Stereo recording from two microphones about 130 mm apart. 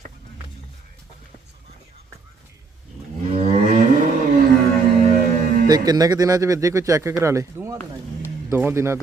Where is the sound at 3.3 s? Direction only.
55° right (ahead or behind).